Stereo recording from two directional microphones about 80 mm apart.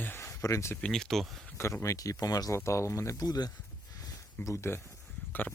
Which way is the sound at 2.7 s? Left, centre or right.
Left.